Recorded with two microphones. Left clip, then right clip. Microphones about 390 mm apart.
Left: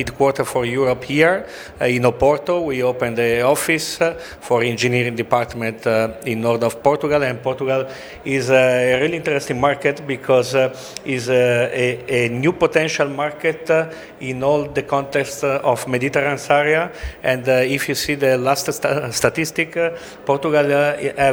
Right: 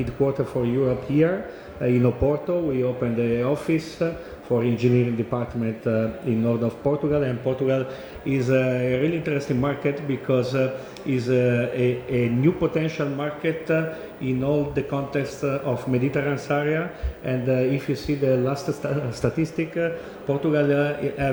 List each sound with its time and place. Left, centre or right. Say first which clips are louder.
0.3 s a man's voice: left 5 dB; left
8.3 s a man's voice: left 8 dB; left